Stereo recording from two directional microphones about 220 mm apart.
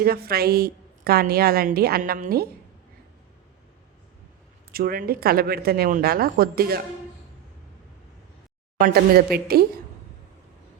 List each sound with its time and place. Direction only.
0.0 s a woman's voice: 45° right (ahead or behind)
4.7 s a woman's voice: 40° right (ahead or behind)
8.8 s a woman's voice: 45° right (ahead or behind)